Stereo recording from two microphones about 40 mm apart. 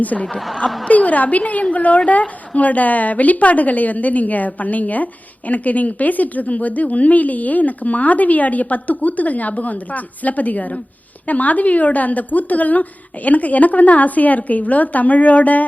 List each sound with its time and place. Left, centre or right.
0.3 s a woman's voice: centre
0.9 s speech: left